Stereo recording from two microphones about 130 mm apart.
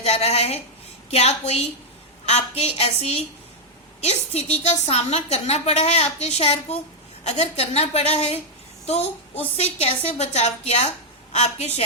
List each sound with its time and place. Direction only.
0.0 s a woman's voice: 55° left (ahead or behind)
9.6 s a woman's voice: 55° left (ahead or behind)